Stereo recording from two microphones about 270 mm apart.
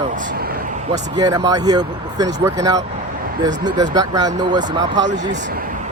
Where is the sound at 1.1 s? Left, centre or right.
Centre.